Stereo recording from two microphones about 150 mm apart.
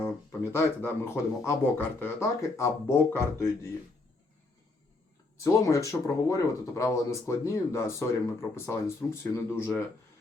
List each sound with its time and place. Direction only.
0.0 s speech: 15° left (ahead or behind)
5.4 s speech: 20° left (ahead or behind)